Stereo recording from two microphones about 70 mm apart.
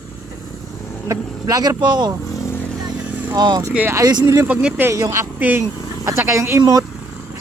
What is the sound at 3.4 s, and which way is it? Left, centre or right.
Speech, right.